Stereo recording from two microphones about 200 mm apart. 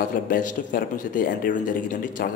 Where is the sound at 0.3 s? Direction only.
40° left (ahead or behind).